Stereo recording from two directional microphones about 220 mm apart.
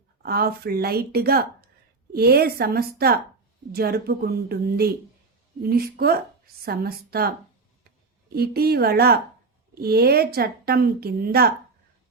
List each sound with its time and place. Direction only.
0.2 s a woman's voice: 45° right (ahead or behind)
8.4 s a woman's voice: 45° right (ahead or behind)